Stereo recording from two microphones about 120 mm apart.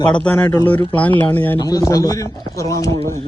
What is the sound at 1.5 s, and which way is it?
A man's voice, 30° left (ahead or behind).